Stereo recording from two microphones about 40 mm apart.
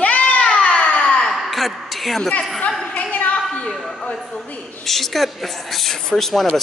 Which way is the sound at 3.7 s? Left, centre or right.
Centre.